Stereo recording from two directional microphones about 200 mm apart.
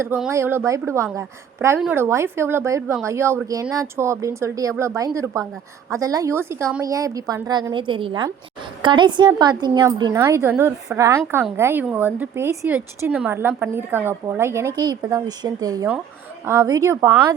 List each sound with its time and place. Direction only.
0.0 s a woman's voice: 10° right (ahead or behind)
10.9 s speech: 15° right (ahead or behind)